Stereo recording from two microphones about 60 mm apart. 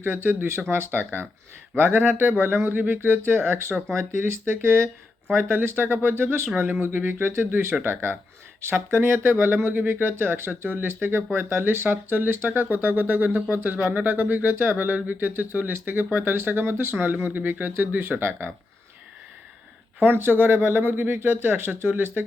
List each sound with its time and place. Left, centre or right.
0.0 s speech: right
9.0 s speech: right
20.0 s speech: right